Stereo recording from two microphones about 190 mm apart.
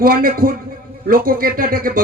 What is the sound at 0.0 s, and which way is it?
Speech, 50° right (ahead or behind).